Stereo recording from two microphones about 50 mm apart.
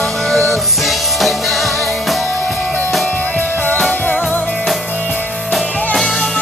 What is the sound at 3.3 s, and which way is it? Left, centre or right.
Music, left.